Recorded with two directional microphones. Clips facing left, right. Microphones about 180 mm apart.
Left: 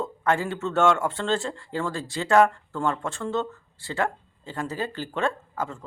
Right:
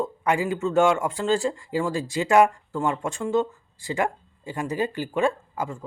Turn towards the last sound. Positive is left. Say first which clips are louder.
# right 1 dB
turn(degrees=-10)  # may be behind; listen again after turning